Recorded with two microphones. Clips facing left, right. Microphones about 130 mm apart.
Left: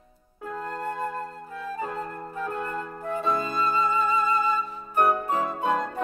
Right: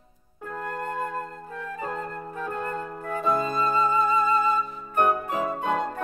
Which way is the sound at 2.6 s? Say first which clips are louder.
Right 1 dB; 35° right (ahead or behind).